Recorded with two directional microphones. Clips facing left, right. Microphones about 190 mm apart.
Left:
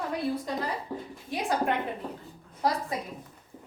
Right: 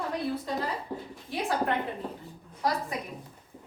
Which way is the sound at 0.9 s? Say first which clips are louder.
Left 1 dB; 15° right (ahead or behind).